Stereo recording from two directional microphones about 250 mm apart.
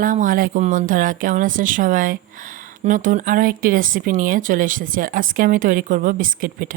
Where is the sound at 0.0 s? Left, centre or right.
Right.